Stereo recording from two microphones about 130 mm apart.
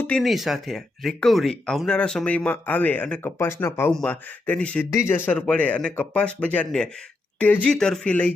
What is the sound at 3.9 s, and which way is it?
Speech, 5° left (ahead or behind).